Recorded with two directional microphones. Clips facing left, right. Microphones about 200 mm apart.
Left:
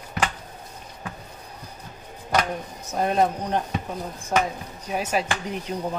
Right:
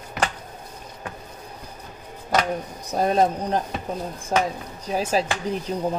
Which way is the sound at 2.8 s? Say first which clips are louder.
Right 2 dB; 35° right (ahead or behind).